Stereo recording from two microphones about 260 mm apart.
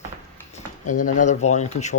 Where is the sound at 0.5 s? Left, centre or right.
Left.